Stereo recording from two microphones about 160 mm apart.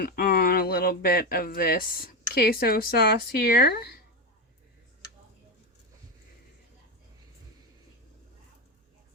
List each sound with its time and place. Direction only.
0.0 s speech: 70° left (ahead or behind)